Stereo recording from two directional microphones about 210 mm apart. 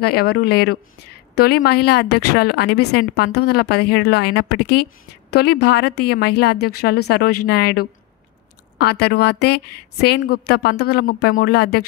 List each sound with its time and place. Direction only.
0.0 s a woman's voice: 50° left (ahead or behind)